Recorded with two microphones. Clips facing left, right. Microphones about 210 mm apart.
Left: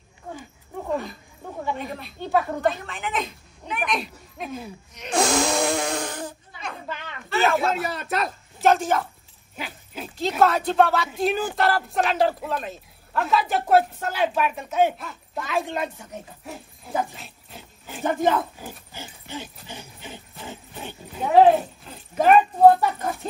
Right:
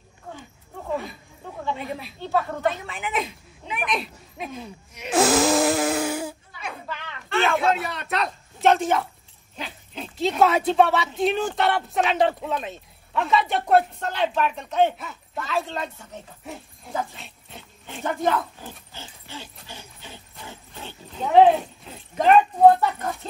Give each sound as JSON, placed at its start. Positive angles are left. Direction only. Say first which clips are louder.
{"t": 0.8, "sound": "wild animals", "louder": "left 1 dB", "side_deg": 0}
{"t": 1.8, "sound": "a woman's voice", "louder": "even", "side_deg": -5}
{"t": 15.4, "sound": "speech", "louder": "left 2 dB", "side_deg": 15}
{"t": 16.5, "sound": "speech", "louder": "right 1 dB", "side_deg": 0}
{"t": 17.1, "sound": "a sound", "louder": "even", "side_deg": 0}
{"t": 18.0, "sound": "speech", "louder": "left 2 dB", "side_deg": 15}
{"t": 19.7, "sound": "a sound", "louder": "left 3 dB", "side_deg": 15}